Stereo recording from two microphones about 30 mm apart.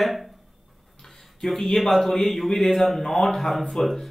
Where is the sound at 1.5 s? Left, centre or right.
Centre.